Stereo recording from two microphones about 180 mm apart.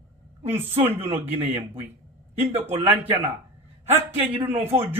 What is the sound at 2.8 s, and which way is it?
A man's voice, 10° right (ahead or behind).